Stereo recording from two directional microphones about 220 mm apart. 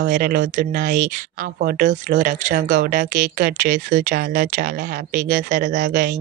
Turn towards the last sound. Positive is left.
turn(degrees=-35)  # may be behind; listen again after turning